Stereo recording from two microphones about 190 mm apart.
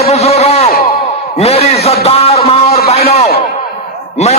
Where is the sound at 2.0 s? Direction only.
30° left (ahead or behind).